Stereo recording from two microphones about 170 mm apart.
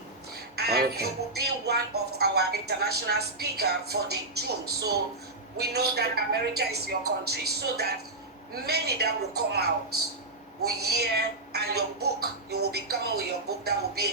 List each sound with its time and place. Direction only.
0.5 s speech: 70° right (ahead or behind)
10.7 s speech: 70° right (ahead or behind)